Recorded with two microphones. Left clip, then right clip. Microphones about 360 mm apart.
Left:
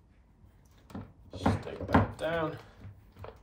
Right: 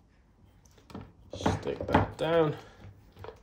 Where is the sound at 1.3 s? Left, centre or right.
Right.